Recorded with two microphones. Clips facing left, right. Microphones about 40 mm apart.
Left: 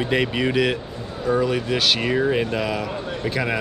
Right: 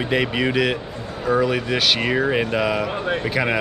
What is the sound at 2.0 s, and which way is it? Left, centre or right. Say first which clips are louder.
Speech: right 1 dB; centre.